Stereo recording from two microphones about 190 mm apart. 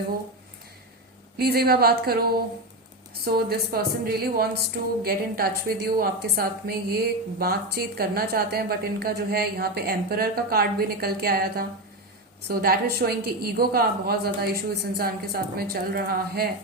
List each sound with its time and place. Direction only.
1.4 s a woman's voice: 55° right (ahead or behind)